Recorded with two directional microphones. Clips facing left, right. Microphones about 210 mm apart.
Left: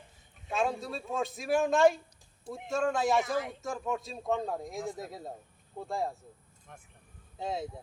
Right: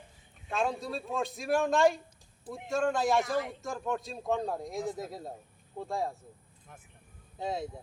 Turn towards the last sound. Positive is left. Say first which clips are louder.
# right 1 dB
turn(degrees=0)  # may be behind; listen again after turning